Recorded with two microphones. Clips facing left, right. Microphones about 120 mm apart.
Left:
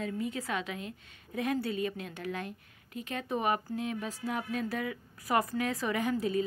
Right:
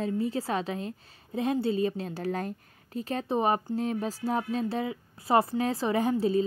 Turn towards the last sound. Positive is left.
turn(degrees=-30)  # may be behind; listen again after turning